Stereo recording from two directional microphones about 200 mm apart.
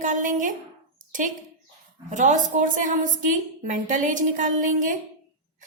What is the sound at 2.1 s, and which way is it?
A woman's voice, 40° right (ahead or behind).